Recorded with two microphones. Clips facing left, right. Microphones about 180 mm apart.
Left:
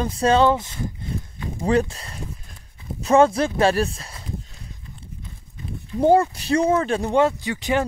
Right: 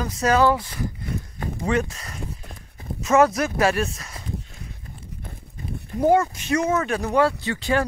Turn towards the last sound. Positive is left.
turn(degrees=15)  # may be behind; listen again after turning